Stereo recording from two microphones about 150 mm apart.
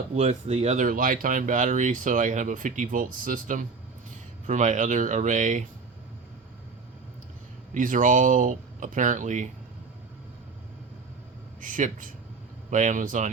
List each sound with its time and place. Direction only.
0.1 s speech: 45° right (ahead or behind)
0.9 s speech: 65° right (ahead or behind)
7.7 s speech: 60° right (ahead or behind)
11.6 s speech: 60° right (ahead or behind)